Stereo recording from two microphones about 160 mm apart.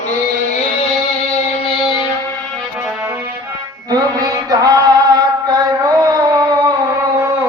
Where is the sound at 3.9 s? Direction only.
25° right (ahead or behind).